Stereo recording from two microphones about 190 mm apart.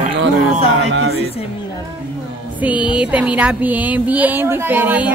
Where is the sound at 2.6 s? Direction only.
5° right (ahead or behind).